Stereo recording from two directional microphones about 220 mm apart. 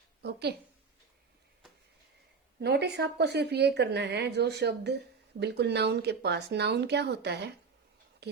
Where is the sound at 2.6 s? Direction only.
50° right (ahead or behind).